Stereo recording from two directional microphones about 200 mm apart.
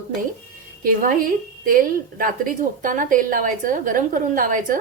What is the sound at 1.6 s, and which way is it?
A woman's voice, 45° right (ahead or behind).